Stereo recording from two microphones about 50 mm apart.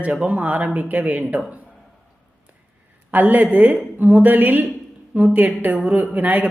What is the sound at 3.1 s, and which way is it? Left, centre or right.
A man's voice, right.